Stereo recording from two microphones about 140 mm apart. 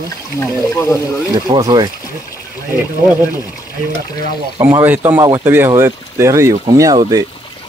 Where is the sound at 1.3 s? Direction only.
30° right (ahead or behind).